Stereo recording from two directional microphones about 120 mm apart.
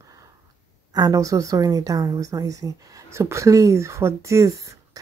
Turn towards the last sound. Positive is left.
turn(degrees=-25)  # may be behind; listen again after turning